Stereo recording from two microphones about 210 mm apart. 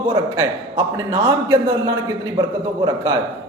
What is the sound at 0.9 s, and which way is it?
Speech, 15° right (ahead or behind).